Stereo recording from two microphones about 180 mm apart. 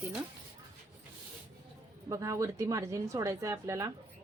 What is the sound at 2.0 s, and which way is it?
Speech, 15° right (ahead or behind).